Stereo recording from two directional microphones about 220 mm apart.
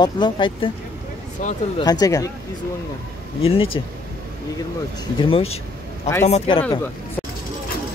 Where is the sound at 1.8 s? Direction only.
15° left (ahead or behind).